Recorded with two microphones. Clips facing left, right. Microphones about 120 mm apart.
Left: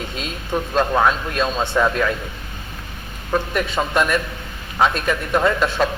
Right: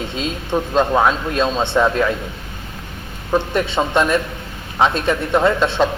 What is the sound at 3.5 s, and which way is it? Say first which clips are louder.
Speech: right 3 dB; 30° right (ahead or behind).